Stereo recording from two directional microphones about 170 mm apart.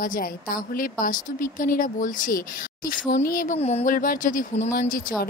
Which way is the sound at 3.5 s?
40° left (ahead or behind).